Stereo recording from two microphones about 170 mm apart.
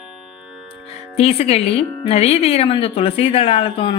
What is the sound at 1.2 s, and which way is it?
A woman's voice, 35° left (ahead or behind).